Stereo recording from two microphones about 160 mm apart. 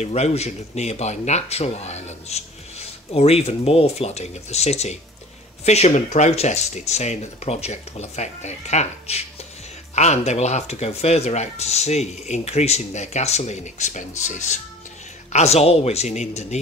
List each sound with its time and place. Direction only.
0.0 s speech: 45° left (ahead or behind)